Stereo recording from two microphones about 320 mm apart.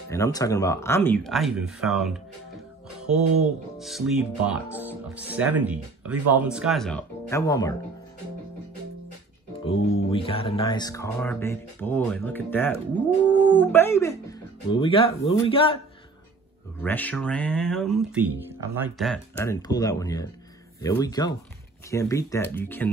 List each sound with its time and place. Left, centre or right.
0.1 s speech: centre
3.7 s speech: centre
9.8 s music: left
10.1 s speech: centre
16.8 s speech: centre